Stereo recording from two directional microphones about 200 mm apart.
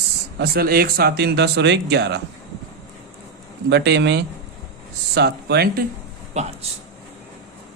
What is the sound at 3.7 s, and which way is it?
Speech, 55° right (ahead or behind).